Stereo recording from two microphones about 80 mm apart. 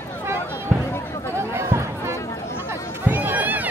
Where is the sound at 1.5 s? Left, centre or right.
Right.